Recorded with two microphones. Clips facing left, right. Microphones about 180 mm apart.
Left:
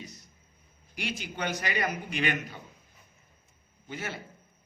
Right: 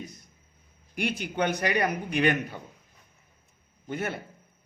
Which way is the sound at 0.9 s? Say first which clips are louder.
Right 7 dB; 55° right (ahead or behind).